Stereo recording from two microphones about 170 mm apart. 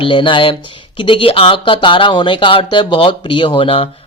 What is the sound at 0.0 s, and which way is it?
Speech, 30° left (ahead or behind).